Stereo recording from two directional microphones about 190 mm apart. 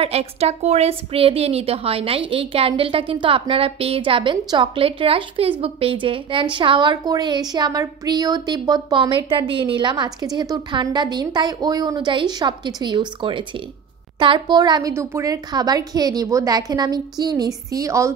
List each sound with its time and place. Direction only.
0.0 s a woman's voice: 30° right (ahead or behind); by 18.1 s 15° right (ahead or behind)